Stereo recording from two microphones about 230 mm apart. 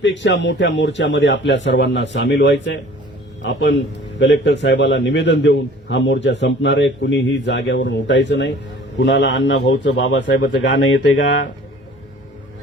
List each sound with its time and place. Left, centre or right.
0.0 s a man's voice: left